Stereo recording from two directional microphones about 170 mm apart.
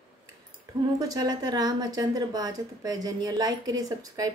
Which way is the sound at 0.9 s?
20° right (ahead or behind).